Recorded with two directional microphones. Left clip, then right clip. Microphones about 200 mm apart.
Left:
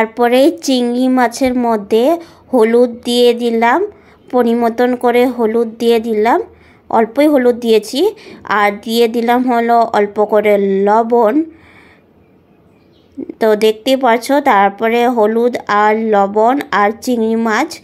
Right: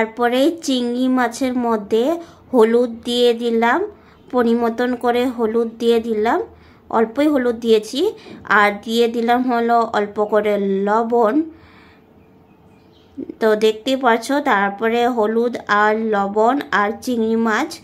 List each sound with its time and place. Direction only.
0.0 s a woman's voice: 20° left (ahead or behind)
13.4 s a woman's voice: 20° left (ahead or behind)